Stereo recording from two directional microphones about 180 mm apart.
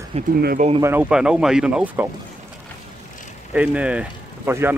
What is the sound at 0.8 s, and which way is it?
Speech, 10° right (ahead or behind).